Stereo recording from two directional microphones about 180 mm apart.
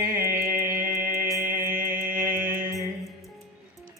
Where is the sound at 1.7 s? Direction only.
50° right (ahead or behind).